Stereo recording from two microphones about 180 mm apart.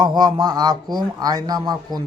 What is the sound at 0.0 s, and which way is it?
A man's voice, 20° right (ahead or behind).